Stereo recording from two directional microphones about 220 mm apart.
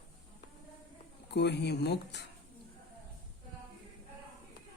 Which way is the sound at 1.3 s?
50° left (ahead or behind).